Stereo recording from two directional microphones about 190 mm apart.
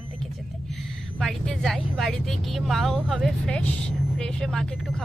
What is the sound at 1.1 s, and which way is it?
Speech, 5° left (ahead or behind).